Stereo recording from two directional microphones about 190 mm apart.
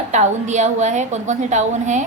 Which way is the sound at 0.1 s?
40° right (ahead or behind).